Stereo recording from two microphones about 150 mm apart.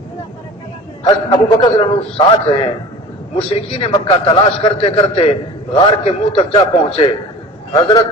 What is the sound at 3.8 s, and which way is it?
A man's voice, 40° left (ahead or behind).